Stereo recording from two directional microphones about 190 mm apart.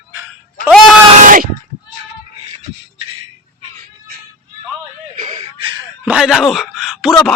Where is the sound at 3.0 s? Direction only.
30° right (ahead or behind).